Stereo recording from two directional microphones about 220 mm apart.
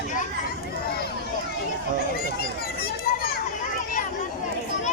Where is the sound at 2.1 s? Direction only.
45° left (ahead or behind).